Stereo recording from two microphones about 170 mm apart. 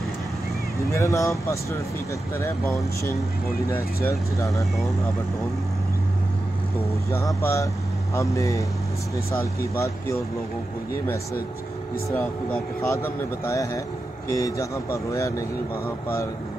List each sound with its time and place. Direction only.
0.9 s speech: 20° left (ahead or behind)
7.1 s speech: 20° left (ahead or behind)
12.4 s speech: 15° left (ahead or behind)